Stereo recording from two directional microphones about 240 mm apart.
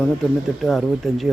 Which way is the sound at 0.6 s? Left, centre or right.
Centre.